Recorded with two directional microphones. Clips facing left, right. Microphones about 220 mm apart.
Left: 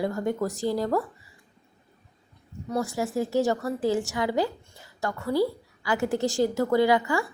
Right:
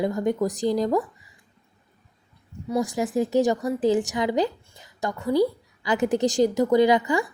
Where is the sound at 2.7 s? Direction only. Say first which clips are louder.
Right 3 dB; 15° right (ahead or behind).